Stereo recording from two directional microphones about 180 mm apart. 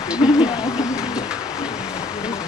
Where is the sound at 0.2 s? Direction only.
30° left (ahead or behind).